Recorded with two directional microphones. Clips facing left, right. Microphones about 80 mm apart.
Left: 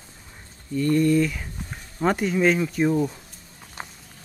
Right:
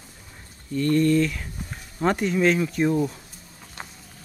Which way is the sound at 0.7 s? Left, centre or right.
Centre.